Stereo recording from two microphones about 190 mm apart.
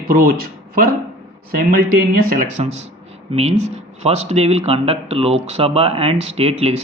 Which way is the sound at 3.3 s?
35° right (ahead or behind).